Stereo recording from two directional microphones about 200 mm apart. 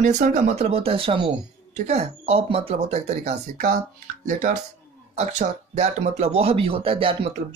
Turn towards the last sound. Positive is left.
turn(degrees=-25)  # may be behind; listen again after turning